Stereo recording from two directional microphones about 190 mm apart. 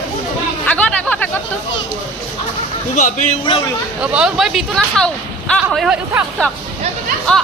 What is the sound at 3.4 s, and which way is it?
Speech, 25° left (ahead or behind).